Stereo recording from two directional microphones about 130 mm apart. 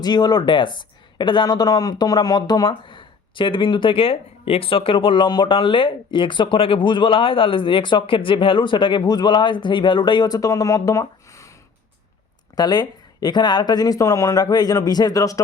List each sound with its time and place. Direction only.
0.0 s speech: 30° left (ahead or behind)
12.5 s speech: 30° left (ahead or behind)